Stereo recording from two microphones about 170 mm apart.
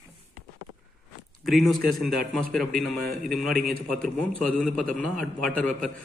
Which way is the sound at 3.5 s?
60° right (ahead or behind).